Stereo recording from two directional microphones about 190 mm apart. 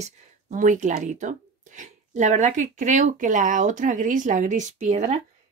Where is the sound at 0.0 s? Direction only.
40° right (ahead or behind).